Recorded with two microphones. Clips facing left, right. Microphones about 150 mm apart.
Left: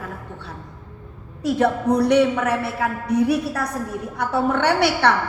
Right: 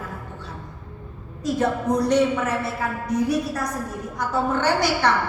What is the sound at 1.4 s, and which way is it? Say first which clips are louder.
A woman's voice: left 3 dB; 65° left (ahead or behind).